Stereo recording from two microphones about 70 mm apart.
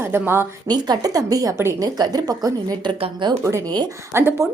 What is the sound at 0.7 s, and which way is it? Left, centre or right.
A woman's voice, right.